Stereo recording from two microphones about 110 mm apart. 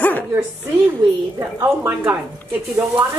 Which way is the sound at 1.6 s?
20° right (ahead or behind).